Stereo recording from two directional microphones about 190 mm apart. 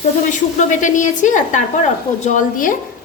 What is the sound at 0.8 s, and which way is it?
A woman's voice, 40° left (ahead or behind).